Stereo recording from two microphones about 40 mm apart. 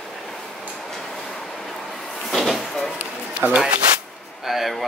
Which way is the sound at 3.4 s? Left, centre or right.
Right.